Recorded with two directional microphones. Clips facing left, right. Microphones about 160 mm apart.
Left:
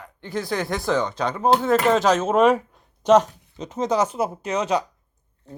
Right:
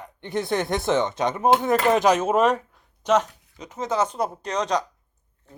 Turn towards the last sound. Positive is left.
turn(degrees=5)  # may be behind; listen again after turning